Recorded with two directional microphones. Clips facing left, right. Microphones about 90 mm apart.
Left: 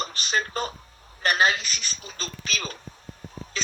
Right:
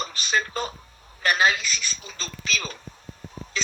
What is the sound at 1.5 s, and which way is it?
Speech, 55° left (ahead or behind).